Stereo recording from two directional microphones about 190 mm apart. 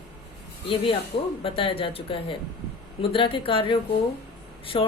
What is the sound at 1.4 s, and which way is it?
A woman's voice, 25° left (ahead or behind).